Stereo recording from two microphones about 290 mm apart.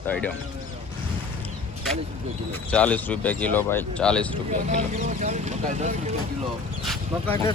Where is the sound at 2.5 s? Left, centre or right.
Centre.